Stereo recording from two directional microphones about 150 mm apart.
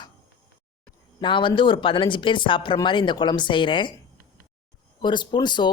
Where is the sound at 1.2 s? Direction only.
30° left (ahead or behind).